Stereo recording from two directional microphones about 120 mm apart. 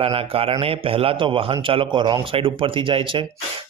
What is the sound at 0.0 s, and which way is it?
A man's voice, 50° right (ahead or behind).